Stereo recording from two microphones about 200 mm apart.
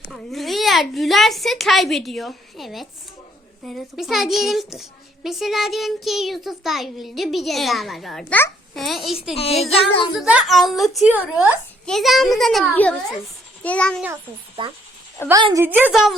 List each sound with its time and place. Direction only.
0.1 s a child's voice: centre (ahead or behind)
9.3 s speech: 30° left (ahead or behind)
10.2 s a child's voice: 5° right (ahead or behind)
15.3 s a woman's voice: 20° right (ahead or behind); by 16.1 s centre (ahead or behind)